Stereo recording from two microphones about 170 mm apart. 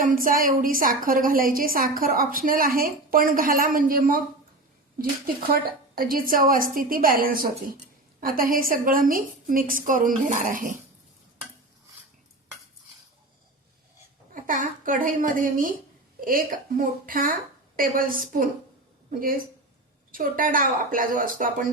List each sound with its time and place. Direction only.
0.0 s a woman's voice: 55° right (ahead or behind)
14.4 s a woman's voice: 50° right (ahead or behind)
20.1 s a woman's voice: 55° right (ahead or behind)